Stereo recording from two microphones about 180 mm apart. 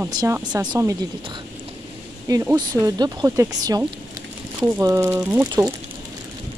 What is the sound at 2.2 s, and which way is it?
Speech, 20° right (ahead or behind).